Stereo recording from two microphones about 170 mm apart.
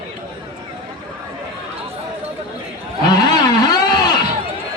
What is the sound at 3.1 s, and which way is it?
Vehicle, 25° left (ahead or behind).